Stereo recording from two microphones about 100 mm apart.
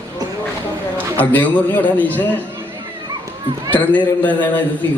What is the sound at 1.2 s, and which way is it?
A man's voice, 20° left (ahead or behind).